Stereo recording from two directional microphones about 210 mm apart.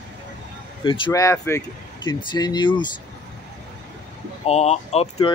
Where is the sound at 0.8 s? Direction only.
25° left (ahead or behind).